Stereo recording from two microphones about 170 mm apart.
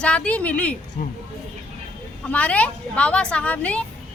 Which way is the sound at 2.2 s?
10° left (ahead or behind).